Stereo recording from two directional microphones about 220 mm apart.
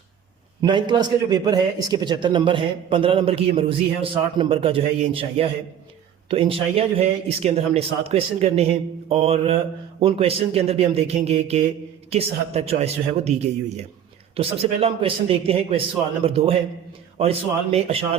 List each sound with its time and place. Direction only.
0.6 s a man's voice: 20° right (ahead or behind)